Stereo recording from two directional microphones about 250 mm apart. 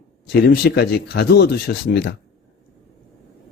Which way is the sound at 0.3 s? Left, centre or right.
Left.